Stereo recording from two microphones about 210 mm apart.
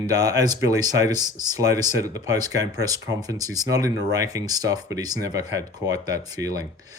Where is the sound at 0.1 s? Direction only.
15° right (ahead or behind).